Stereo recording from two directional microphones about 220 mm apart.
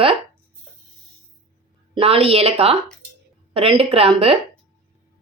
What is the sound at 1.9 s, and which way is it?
Speech, 25° right (ahead or behind).